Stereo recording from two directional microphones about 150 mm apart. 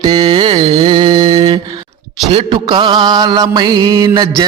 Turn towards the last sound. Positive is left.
turn(degrees=-25)  # may be behind; listen again after turning